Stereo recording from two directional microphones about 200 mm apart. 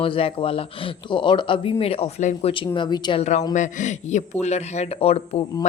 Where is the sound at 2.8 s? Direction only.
20° left (ahead or behind).